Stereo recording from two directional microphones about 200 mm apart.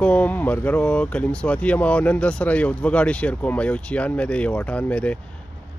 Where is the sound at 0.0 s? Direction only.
5° left (ahead or behind).